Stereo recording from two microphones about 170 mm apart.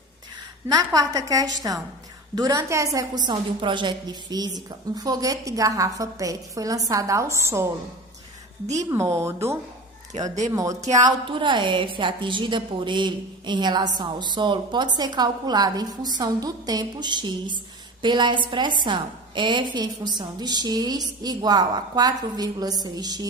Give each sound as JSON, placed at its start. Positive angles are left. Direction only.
{"t": 0.7, "sound": "a woman's voice", "side_deg": -20}
{"t": 8.9, "sound": "speech", "side_deg": -15}
{"t": 10.2, "sound": "speech", "side_deg": -45}
{"t": 10.5, "sound": "a woman's voice", "side_deg": -20}